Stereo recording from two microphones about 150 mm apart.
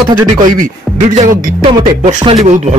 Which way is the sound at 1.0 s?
55° right (ahead or behind).